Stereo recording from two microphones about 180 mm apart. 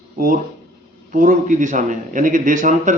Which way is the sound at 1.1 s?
45° right (ahead or behind).